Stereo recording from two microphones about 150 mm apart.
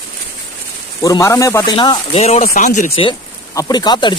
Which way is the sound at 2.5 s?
55° left (ahead or behind).